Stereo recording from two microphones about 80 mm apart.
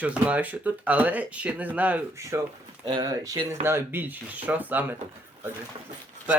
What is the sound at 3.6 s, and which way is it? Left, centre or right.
Speech, right.